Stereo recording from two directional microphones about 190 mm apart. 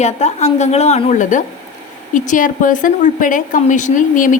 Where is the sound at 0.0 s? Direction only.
35° left (ahead or behind).